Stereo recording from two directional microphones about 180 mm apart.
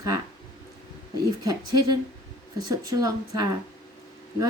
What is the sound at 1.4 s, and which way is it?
A woman's voice, 20° right (ahead or behind).